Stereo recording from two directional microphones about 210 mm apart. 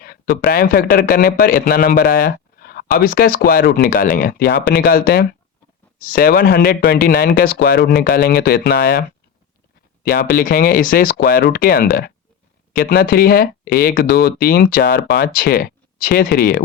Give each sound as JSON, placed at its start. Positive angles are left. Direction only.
{"t": 0.0, "sound": "a man's voice", "side_deg": 45}